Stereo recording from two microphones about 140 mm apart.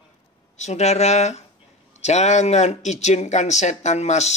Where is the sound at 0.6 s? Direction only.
55° left (ahead or behind).